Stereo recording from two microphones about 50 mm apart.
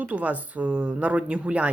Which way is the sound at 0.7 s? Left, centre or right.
Centre.